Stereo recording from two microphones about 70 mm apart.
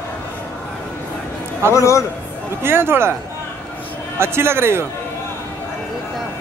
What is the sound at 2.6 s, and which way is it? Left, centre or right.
Speech, right.